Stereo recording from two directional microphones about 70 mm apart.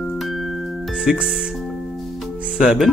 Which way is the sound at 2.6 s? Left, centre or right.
Centre.